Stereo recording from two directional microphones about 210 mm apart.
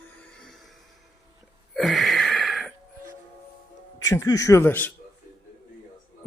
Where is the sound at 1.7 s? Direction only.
Centre (ahead or behind).